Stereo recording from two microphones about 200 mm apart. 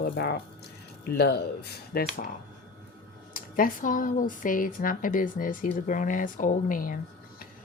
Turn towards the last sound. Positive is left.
turn(degrees=45)  # may be behind; listen again after turning